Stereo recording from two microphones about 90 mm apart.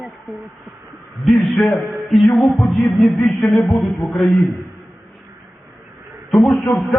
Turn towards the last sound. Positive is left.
turn(degrees=5)  # may be behind; listen again after turning